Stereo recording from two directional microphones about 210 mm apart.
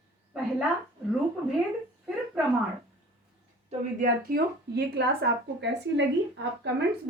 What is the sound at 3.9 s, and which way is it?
A woman's voice, 45° right (ahead or behind).